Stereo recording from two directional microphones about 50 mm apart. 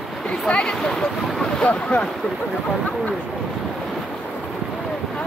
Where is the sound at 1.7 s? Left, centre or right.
Left.